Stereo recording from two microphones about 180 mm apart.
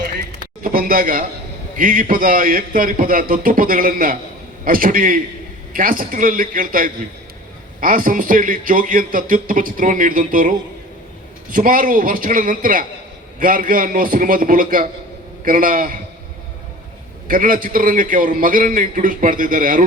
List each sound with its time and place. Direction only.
0.6 s a sound: 50° right (ahead or behind)
1.7 s a man's voice: 50° right (ahead or behind)
11.5 s a man's voice: 50° right (ahead or behind)
17.2 s a man's voice: 50° right (ahead or behind)